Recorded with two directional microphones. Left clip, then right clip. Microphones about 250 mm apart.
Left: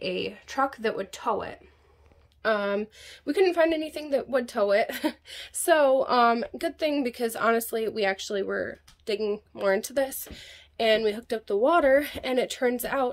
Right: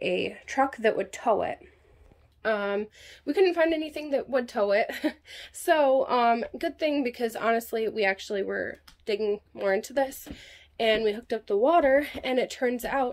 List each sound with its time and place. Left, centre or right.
0.0 s speech: left
0.3 s speech: centre
2.4 s a woman's voice: centre